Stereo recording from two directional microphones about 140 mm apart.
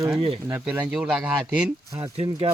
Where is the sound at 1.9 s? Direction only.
35° right (ahead or behind).